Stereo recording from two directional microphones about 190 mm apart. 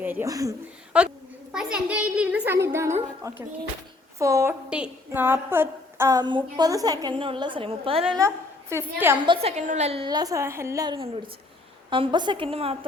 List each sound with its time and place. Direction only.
0.0 s a woman's voice: 10° right (ahead or behind)
0.9 s a woman's voice: 5° right (ahead or behind); by 8.2 s 30° right (ahead or behind)
8.7 s a woman's voice: 15° right (ahead or behind)
9.2 s a woman's voice: 30° right (ahead or behind)
10.9 s a woman's voice: 30° right (ahead or behind)